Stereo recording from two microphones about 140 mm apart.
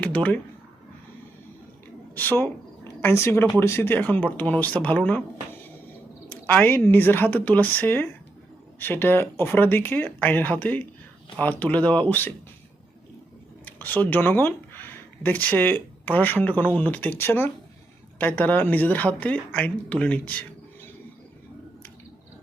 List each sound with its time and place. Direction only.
0.0 s a sound: 10° left (ahead or behind)
2.1 s speech: 15° left (ahead or behind)
6.2 s speech: 10° left (ahead or behind)
13.7 s speech: 10° left (ahead or behind)